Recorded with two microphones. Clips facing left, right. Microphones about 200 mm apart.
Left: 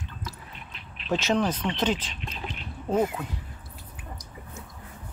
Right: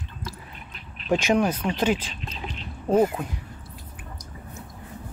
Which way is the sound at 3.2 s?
15° right (ahead or behind).